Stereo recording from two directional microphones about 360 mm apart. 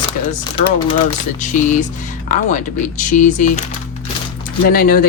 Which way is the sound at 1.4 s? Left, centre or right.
Left.